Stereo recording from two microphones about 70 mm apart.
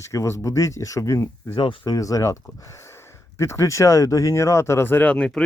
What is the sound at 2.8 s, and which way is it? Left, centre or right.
Speech, left.